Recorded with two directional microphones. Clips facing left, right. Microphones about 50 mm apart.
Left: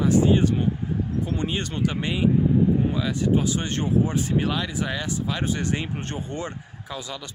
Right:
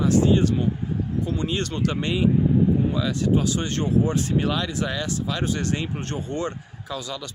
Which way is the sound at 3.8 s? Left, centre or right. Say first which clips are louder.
Right 1 dB; centre.